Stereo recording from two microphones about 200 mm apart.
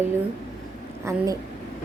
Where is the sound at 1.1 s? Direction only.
15° right (ahead or behind).